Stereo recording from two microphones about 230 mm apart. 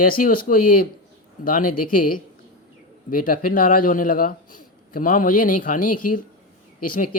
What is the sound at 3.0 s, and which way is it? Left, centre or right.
A man's voice, left.